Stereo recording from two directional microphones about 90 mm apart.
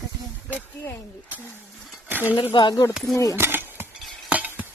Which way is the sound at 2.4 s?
60° left (ahead or behind).